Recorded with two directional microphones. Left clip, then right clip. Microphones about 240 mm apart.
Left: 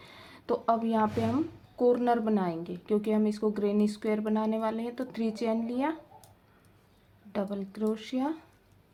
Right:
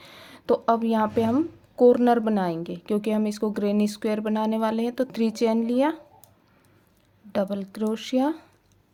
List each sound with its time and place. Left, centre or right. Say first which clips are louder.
0.0 s speech: right 6 dB; right
7.3 s speech: right 7 dB; right